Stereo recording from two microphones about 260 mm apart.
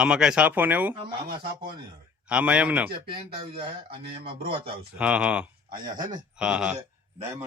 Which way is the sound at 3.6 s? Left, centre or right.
Centre.